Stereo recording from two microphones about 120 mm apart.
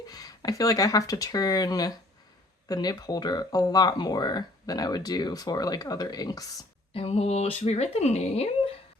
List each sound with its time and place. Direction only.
0.1 s speech: 30° left (ahead or behind)
6.9 s speech: 55° left (ahead or behind)